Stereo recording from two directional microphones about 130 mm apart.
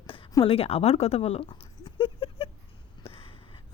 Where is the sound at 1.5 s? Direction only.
35° left (ahead or behind).